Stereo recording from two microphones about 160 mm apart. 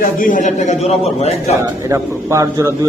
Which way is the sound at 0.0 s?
55° left (ahead or behind).